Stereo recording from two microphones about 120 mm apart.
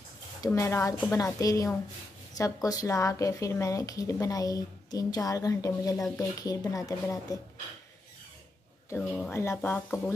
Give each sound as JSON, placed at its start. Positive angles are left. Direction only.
{"t": 0.5, "sound": "speech", "side_deg": 25}
{"t": 9.3, "sound": "speech", "side_deg": 20}